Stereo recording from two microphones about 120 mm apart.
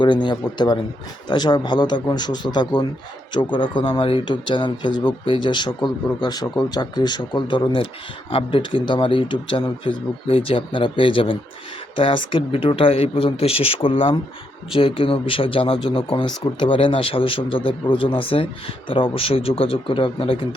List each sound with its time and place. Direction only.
0.0 s speech: 40° left (ahead or behind)